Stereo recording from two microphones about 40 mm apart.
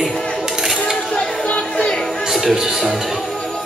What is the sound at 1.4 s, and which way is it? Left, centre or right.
Music, left.